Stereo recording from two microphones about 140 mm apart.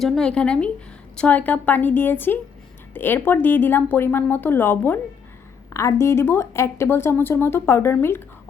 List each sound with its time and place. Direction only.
0.0 s speech: centre (ahead or behind)